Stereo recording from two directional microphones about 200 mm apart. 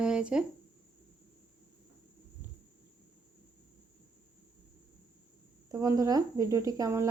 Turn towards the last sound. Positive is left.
turn(degrees=-15)  # may be behind; listen again after turning